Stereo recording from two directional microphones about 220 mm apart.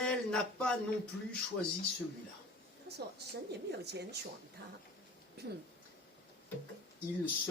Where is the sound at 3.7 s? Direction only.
50° right (ahead or behind).